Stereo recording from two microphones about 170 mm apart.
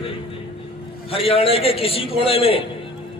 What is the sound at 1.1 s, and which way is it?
A man's voice, 35° left (ahead or behind).